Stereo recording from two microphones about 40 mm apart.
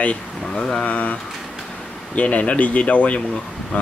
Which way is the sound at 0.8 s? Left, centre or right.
Left.